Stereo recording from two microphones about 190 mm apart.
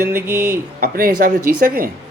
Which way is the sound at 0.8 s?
50° right (ahead or behind).